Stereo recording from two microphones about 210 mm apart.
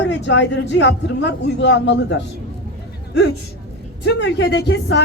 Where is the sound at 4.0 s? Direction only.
55° left (ahead or behind).